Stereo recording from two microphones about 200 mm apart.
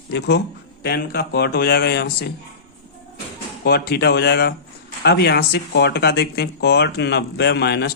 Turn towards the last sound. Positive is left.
turn(degrees=55)  # may be behind; listen again after turning